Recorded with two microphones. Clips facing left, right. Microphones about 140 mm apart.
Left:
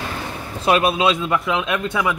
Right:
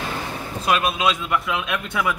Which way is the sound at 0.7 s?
30° left (ahead or behind).